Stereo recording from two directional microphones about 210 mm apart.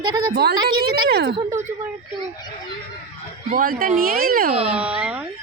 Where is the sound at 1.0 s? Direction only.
50° right (ahead or behind).